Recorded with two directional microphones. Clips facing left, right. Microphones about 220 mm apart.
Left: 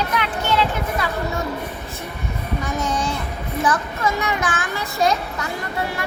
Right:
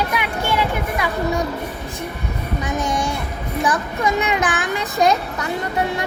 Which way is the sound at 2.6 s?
15° right (ahead or behind).